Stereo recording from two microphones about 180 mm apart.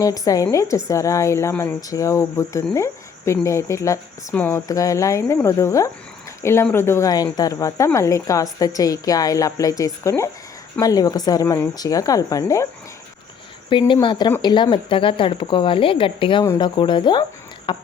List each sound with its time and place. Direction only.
0.0 s a woman's voice: 20° left (ahead or behind)
13.7 s a woman's voice: 25° left (ahead or behind)